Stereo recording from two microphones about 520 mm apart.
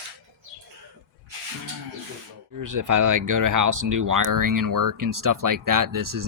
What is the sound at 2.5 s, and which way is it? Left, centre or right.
Speech, right.